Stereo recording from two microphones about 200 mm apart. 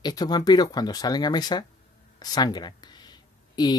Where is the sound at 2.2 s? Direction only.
20° left (ahead or behind).